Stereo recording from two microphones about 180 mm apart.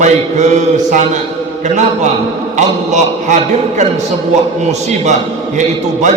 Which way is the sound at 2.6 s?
40° right (ahead or behind).